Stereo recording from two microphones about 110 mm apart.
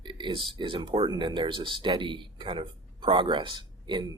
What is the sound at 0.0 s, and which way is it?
Speech, 45° right (ahead or behind).